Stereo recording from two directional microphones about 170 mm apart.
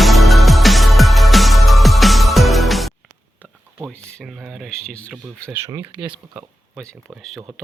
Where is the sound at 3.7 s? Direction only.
5° right (ahead or behind).